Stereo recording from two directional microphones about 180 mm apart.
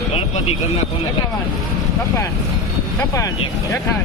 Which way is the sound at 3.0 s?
15° left (ahead or behind).